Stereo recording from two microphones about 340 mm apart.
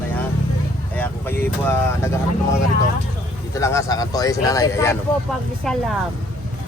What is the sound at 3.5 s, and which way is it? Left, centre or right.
Speech, centre.